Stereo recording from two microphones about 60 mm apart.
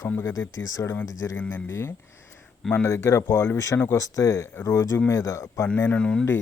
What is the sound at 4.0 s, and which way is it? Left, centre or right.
Speech, left.